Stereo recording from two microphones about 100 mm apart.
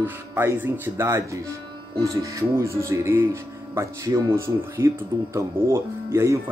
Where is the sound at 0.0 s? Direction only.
25° right (ahead or behind).